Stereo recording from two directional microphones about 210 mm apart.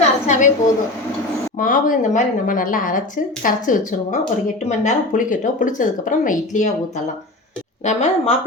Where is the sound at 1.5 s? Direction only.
40° left (ahead or behind).